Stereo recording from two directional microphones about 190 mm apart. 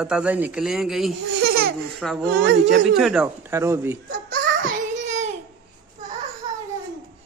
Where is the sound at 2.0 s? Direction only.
Centre (ahead or behind); by 4.0 s 15° right (ahead or behind).